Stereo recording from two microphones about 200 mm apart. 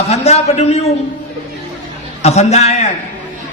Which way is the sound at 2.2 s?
35° left (ahead or behind).